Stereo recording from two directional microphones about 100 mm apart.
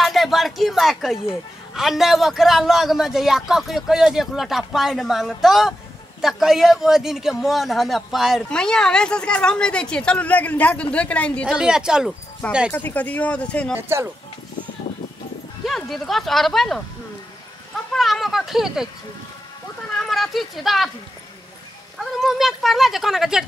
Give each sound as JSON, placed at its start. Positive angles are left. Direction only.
{"t": 0.0, "sound": "a man's voice", "side_deg": 0}
{"t": 11.4, "sound": "speech", "side_deg": -5}
{"t": 12.4, "sound": "a woman's voice", "side_deg": 10}
{"t": 13.7, "sound": "speech", "side_deg": -25}
{"t": 15.6, "sound": "a man's voice", "side_deg": 0}
{"t": 17.7, "sound": "a sound", "side_deg": 0}
{"t": 20.0, "sound": "speech", "side_deg": 0}
{"t": 21.9, "sound": "a man's voice", "side_deg": 0}